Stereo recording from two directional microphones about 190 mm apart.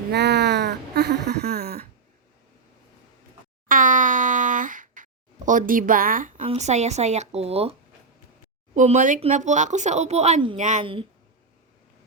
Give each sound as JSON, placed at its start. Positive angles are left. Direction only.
{"t": 0.1, "sound": "a sound", "side_deg": -60}
{"t": 3.7, "sound": "boing", "side_deg": -45}
{"t": 5.5, "sound": "a woman's voice", "side_deg": -45}